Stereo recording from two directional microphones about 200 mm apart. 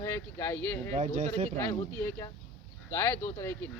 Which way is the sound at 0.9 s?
35° right (ahead or behind).